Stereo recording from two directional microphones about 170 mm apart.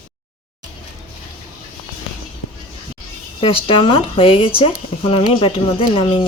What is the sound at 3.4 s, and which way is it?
Speech, 30° left (ahead or behind).